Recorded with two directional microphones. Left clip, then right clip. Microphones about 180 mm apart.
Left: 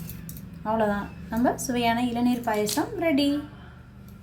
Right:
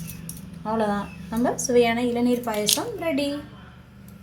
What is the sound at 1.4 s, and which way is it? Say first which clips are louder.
A woman's voice: right 5 dB; 20° right (ahead or behind).